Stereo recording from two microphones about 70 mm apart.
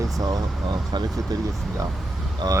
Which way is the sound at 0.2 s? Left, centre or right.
Right.